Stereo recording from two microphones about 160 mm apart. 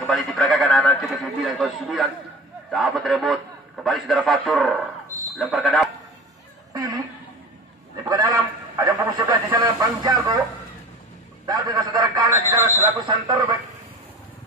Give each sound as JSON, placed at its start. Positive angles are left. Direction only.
{"t": 0.0, "sound": "a sound", "side_deg": 0}
{"t": 2.7, "sound": "a man's voice", "side_deg": 0}
{"t": 6.7, "sound": "a man's voice", "side_deg": -25}
{"t": 11.4, "sound": "a man's voice", "side_deg": -25}